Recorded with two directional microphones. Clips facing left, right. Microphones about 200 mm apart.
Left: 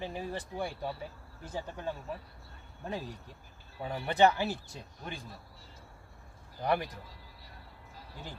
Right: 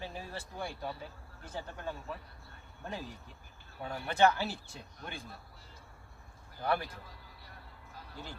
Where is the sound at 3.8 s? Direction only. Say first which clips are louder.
Left 2 dB; 20° left (ahead or behind).